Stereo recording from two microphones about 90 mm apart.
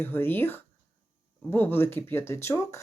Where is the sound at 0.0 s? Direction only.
25° left (ahead or behind).